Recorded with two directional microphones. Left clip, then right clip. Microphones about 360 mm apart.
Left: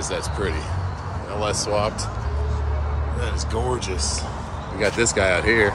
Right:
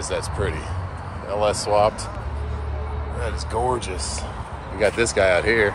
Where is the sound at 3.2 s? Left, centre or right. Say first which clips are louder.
Right 3 dB; centre.